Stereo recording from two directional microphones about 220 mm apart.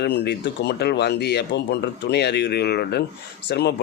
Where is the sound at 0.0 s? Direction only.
50° left (ahead or behind).